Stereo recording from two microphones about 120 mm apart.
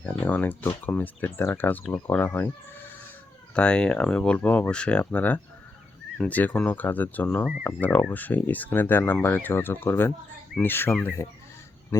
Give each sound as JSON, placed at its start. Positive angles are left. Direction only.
{"t": 0.0, "sound": "speech", "side_deg": 10}
{"t": 3.5, "sound": "speech", "side_deg": 10}